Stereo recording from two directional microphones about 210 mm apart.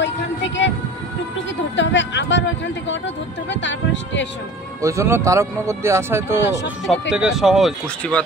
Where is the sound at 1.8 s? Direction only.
60° left (ahead or behind).